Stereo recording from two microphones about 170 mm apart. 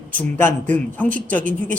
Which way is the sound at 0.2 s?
10° left (ahead or behind).